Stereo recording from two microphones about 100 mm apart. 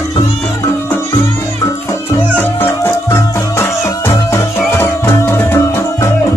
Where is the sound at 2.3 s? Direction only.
25° left (ahead or behind).